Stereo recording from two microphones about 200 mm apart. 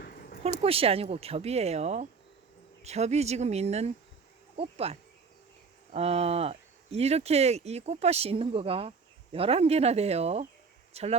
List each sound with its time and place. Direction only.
0.6 s speech: 30° right (ahead or behind)